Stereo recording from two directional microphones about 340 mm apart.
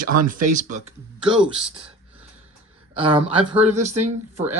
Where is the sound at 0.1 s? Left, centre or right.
Right.